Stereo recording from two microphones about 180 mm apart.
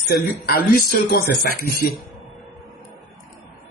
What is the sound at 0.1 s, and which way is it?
Speech, 60° left (ahead or behind).